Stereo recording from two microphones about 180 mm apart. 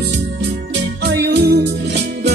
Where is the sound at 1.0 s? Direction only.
70° right (ahead or behind).